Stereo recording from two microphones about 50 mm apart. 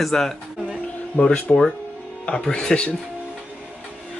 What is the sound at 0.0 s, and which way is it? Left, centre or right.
Music, centre.